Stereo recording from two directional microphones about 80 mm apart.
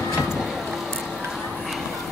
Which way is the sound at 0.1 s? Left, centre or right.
Centre.